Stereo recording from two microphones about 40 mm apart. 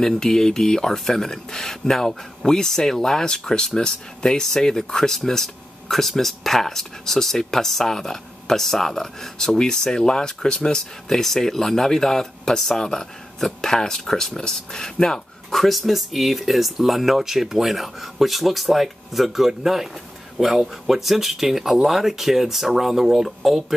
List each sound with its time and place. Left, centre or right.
0.0 s speech: centre
15.5 s speech: centre